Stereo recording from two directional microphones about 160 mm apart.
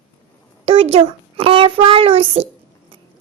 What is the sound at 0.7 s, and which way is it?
A woman's voice, 40° right (ahead or behind).